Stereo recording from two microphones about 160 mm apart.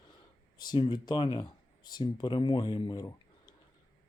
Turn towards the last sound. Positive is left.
turn(degrees=25)  # may be behind; listen again after turning